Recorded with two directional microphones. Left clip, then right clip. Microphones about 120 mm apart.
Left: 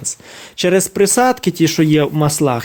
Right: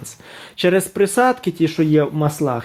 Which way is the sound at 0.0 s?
20° left (ahead or behind).